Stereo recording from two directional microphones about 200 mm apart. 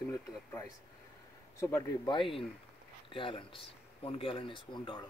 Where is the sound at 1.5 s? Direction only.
15° left (ahead or behind).